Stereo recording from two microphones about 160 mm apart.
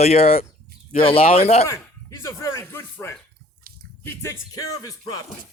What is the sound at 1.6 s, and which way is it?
Speech, 20° left (ahead or behind).